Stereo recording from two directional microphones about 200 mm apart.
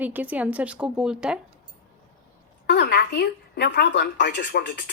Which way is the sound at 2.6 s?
60° left (ahead or behind).